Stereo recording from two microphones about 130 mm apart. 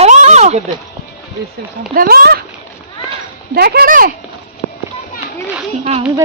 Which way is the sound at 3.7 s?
90° right.